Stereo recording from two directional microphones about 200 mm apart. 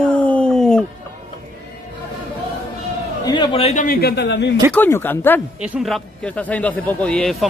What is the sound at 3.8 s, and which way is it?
Speech, 50° left (ahead or behind).